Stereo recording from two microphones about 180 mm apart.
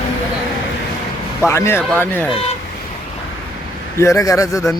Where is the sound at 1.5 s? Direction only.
15° left (ahead or behind).